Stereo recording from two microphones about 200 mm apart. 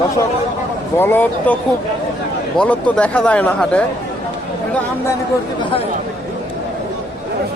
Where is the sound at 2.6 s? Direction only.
5° left (ahead or behind).